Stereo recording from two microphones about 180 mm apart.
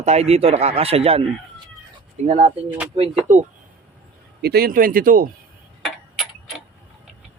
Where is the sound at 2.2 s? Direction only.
35° right (ahead or behind).